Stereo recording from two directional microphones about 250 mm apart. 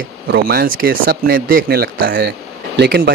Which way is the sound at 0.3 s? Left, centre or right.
Right.